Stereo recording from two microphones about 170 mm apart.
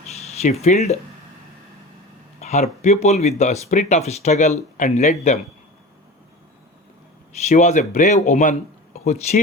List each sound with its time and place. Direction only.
0.2 s speech: 40° left (ahead or behind)
2.4 s speech: 40° left (ahead or behind)
7.4 s speech: 45° left (ahead or behind)